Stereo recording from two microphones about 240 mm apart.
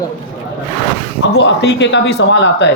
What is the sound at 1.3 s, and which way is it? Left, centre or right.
Speech, left.